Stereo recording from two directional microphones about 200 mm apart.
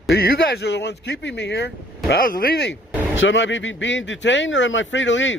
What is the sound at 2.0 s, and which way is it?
Speech, 45° left (ahead or behind).